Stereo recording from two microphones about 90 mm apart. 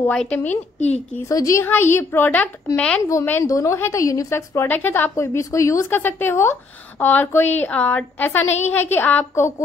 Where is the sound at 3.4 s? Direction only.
35° left (ahead or behind).